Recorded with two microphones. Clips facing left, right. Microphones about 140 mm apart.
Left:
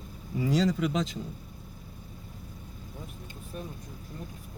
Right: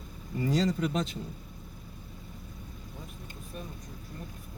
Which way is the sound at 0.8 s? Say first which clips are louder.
Left 1 dB; 90° left.